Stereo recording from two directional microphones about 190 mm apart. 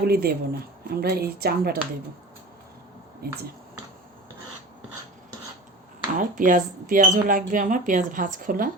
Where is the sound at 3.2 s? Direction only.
55° right (ahead or behind).